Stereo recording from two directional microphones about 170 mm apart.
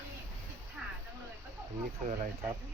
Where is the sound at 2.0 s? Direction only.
45° right (ahead or behind).